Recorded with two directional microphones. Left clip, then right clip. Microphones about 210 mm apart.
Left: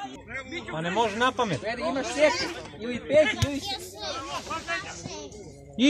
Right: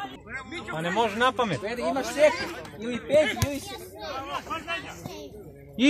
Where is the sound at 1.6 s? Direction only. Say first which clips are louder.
Right 1 dB; 40° right (ahead or behind).